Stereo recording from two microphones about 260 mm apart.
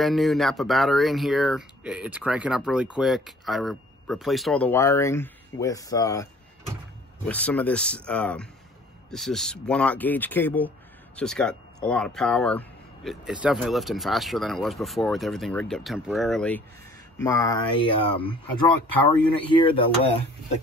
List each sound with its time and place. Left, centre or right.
0.0 s speech: centre
7.2 s speech: centre
19.5 s speech: centre